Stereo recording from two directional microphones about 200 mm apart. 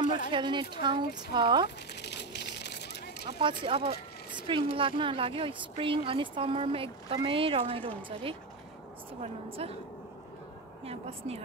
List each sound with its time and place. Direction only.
0.3 s speech: 25° right (ahead or behind)
2.0 s a sound: 55° left (ahead or behind)
3.3 s speech: 25° right (ahead or behind)
9.2 s a woman's voice: 30° right (ahead or behind)
10.9 s speech: 30° right (ahead or behind)